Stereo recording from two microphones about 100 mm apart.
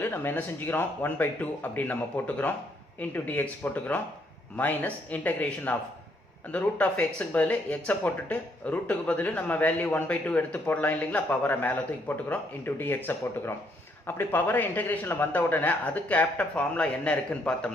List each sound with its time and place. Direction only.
0.1 s speech: 25° left (ahead or behind)
6.7 s speech: 15° left (ahead or behind)